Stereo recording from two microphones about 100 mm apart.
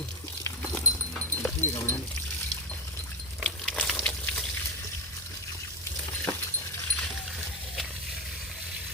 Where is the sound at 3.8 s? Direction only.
Centre (ahead or behind).